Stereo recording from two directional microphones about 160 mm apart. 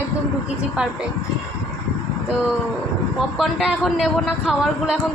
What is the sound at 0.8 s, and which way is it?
Speech, 5° right (ahead or behind).